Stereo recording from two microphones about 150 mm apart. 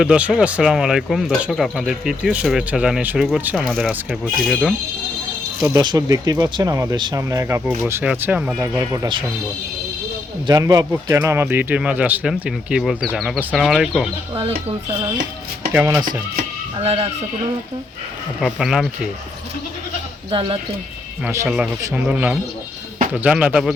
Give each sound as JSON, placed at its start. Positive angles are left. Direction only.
{"t": 0.0, "sound": "speech", "side_deg": -5}
{"t": 5.7, "sound": "speech", "side_deg": -25}
{"t": 6.9, "sound": "speech", "side_deg": -30}
{"t": 7.2, "sound": "speech", "side_deg": -20}
{"t": 8.6, "sound": "speech", "side_deg": -20}
{"t": 10.4, "sound": "speech", "side_deg": -25}
{"t": 14.3, "sound": "speech", "side_deg": -40}
{"t": 15.7, "sound": "speech", "side_deg": -10}
{"t": 16.7, "sound": "speech", "side_deg": -40}
{"t": 18.3, "sound": "speech", "side_deg": 0}
{"t": 20.3, "sound": "speech", "side_deg": -35}
{"t": 21.2, "sound": "speech", "side_deg": -15}